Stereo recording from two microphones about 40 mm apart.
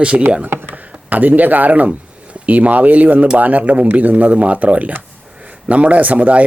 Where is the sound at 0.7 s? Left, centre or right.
Right.